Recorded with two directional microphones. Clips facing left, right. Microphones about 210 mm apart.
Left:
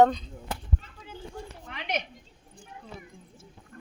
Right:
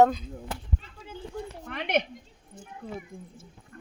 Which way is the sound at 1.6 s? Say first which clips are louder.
Right 6 dB; 55° right (ahead or behind).